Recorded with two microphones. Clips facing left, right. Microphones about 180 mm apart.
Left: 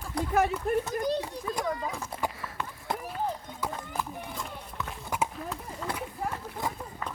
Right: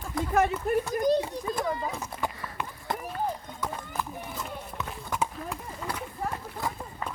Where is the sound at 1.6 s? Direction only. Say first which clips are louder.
Right 1 dB; 30° right (ahead or behind).